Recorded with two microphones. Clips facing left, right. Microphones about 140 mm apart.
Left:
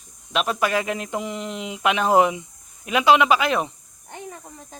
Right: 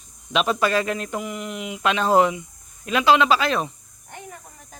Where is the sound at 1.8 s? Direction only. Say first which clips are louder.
Even; 15° left (ahead or behind).